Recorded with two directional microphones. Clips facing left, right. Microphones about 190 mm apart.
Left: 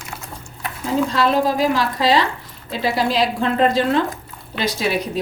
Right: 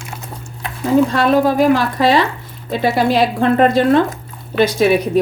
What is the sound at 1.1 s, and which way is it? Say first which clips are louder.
A woman's voice: right 4 dB; 55° right (ahead or behind).